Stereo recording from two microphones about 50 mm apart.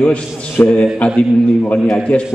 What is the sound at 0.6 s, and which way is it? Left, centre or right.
Speech, left.